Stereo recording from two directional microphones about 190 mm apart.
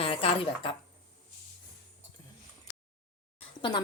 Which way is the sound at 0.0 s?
30° left (ahead or behind).